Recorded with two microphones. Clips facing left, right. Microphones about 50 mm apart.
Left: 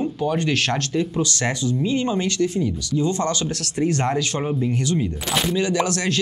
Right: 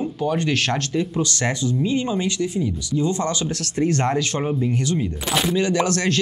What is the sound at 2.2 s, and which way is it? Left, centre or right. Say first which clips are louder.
Speech: left 1 dB; centre.